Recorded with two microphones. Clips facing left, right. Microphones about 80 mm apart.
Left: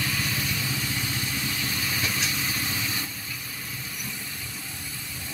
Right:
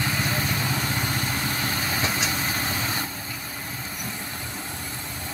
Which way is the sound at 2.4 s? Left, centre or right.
Right.